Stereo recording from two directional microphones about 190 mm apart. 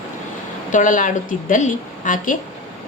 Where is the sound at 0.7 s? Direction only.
40° left (ahead or behind).